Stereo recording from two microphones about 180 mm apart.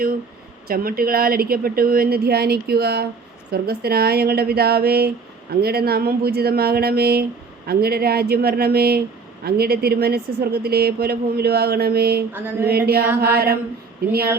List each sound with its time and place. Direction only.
0.7 s speech: 55° right (ahead or behind)
12.3 s a sound: 10° right (ahead or behind)
12.6 s speech: 60° right (ahead or behind)